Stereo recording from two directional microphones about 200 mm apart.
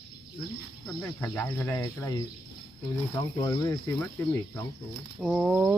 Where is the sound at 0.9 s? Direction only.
15° left (ahead or behind).